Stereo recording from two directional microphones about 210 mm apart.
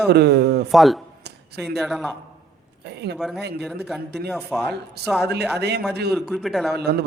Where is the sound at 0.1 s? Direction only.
50° right (ahead or behind).